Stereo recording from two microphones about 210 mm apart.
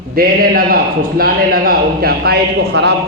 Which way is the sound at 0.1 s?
45° right (ahead or behind).